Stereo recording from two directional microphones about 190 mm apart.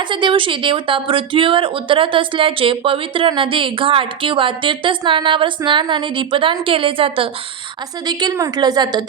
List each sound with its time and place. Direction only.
0.0 s speech: 25° right (ahead or behind)